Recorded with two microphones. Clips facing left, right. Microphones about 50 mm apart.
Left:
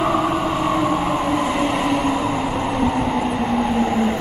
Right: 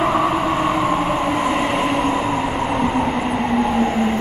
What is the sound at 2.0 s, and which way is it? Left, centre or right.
Train, centre.